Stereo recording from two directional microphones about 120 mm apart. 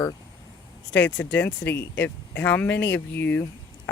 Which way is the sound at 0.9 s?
15° left (ahead or behind).